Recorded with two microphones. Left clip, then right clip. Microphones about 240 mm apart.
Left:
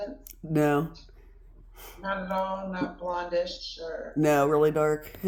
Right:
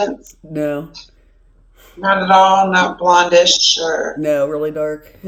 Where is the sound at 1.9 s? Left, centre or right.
Right.